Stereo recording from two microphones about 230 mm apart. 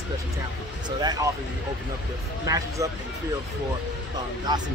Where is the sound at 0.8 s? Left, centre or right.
Centre.